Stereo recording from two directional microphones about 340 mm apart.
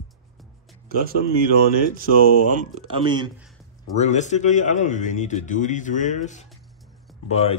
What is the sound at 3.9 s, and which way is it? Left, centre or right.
A man's voice, centre.